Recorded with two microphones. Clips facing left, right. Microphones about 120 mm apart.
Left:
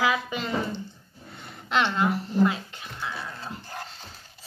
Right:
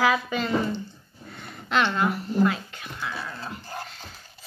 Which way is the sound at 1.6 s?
20° left (ahead or behind).